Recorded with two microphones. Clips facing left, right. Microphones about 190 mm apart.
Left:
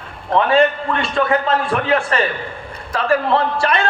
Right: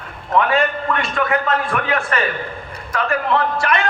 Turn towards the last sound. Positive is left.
turn(degrees=30)  # may be behind; listen again after turning